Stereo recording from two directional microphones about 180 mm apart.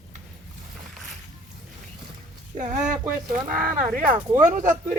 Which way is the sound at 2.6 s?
45° right (ahead or behind).